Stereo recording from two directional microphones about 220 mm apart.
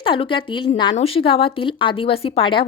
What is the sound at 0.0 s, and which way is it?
A woman's voice, 25° left (ahead or behind).